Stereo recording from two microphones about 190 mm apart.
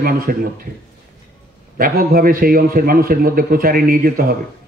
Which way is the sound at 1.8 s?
50° right (ahead or behind).